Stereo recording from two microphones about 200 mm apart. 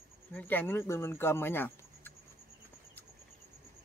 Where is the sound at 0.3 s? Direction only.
10° left (ahead or behind).